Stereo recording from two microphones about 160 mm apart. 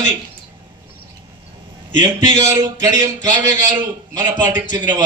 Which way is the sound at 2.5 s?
25° right (ahead or behind).